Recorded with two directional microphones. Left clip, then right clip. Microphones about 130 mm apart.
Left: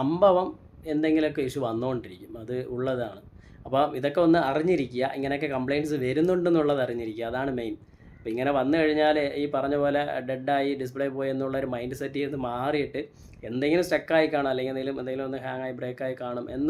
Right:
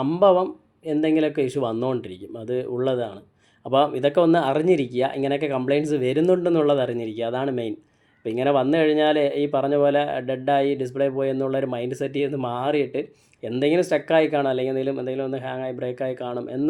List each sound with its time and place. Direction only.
0.0 s speech: 20° right (ahead or behind)